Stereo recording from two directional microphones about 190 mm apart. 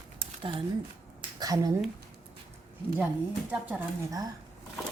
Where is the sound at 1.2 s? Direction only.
20° right (ahead or behind).